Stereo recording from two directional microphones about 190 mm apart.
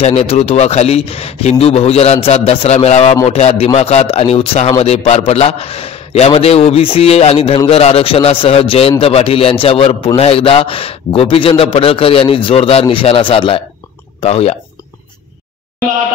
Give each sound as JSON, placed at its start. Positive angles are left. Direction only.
{"t": 0.0, "sound": "a man's voice", "side_deg": 35}